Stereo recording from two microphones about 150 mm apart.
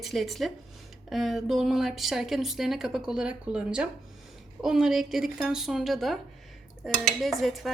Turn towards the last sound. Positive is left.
turn(degrees=0)  # may be behind; listen again after turning